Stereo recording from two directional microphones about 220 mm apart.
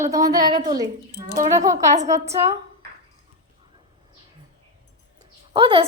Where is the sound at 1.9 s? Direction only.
30° right (ahead or behind).